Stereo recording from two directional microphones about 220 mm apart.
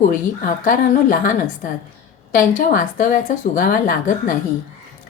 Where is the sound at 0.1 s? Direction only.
35° left (ahead or behind).